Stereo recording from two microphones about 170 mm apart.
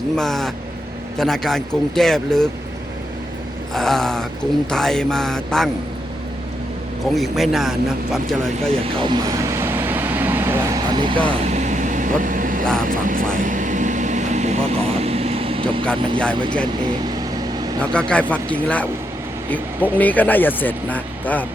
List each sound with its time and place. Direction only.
0.2 s speech: centre (ahead or behind)
3.8 s speech: centre (ahead or behind)
7.1 s speech: centre (ahead or behind)
8.8 s vehicle: 30° right (ahead or behind)
11.4 s vehicle: 45° right (ahead or behind)
15.9 s speech: 5° left (ahead or behind)
17.7 s speech: 5° left (ahead or behind)